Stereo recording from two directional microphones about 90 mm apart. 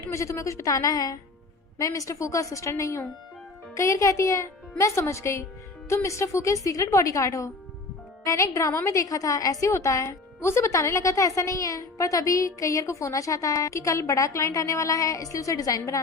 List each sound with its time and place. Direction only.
0.0 s a woman's voice: 35° left (ahead or behind)